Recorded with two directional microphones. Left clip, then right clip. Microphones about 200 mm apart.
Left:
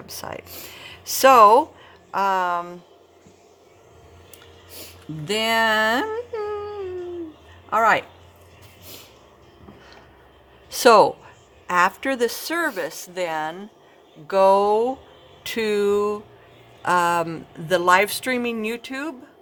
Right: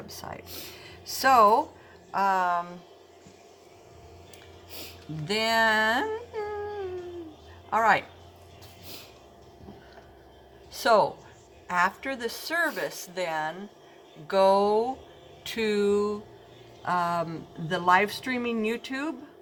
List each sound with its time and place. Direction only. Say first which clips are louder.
0.1 s speech: left 8 dB; 55° left (ahead or behind)
0.4 s speech: left 2 dB; centre (ahead or behind)
0.8 s speech: left 11 dB; 55° left (ahead or behind)
5.2 s speech: left 4 dB; 45° left (ahead or behind)
7.7 s speech: left 5 dB; 45° left (ahead or behind)
10.7 s speech: left 8 dB; 60° left (ahead or behind); by 19.1 s 45° left (ahead or behind)